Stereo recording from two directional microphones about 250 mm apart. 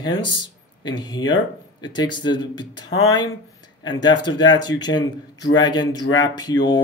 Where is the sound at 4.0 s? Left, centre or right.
Centre.